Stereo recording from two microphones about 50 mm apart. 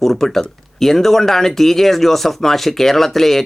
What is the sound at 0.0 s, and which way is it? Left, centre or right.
Speech, centre.